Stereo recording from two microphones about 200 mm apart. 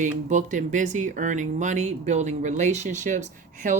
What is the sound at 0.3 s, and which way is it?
Speech, 40° right (ahead or behind).